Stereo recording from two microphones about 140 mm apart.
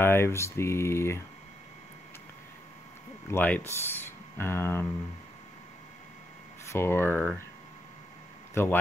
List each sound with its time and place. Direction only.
0.0 s speech: 15° left (ahead or behind)
3.3 s speech: 10° left (ahead or behind)
6.7 s speech: 20° left (ahead or behind)